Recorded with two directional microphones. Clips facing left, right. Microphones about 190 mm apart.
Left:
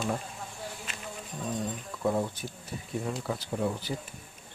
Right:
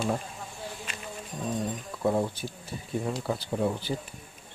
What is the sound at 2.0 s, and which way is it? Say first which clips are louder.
Speech: right 2 dB; 30° right (ahead or behind).